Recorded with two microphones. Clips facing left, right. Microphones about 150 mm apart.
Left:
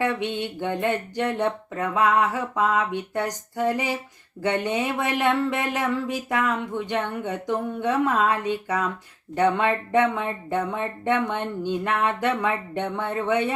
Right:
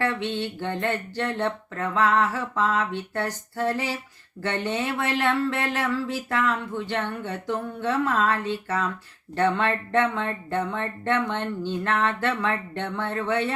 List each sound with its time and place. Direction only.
0.0 s speech: 15° left (ahead or behind)